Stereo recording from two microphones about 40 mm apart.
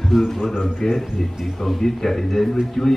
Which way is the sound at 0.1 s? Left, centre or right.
Centre.